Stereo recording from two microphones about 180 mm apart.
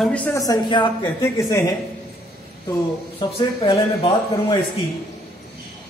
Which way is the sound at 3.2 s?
30° left (ahead or behind).